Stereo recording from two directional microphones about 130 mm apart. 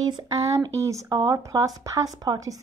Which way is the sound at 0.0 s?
30° right (ahead or behind).